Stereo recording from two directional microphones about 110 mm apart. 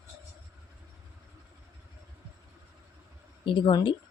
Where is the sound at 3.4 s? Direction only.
50° left (ahead or behind).